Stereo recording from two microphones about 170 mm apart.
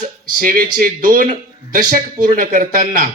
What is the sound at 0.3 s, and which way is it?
Speech, 55° right (ahead or behind).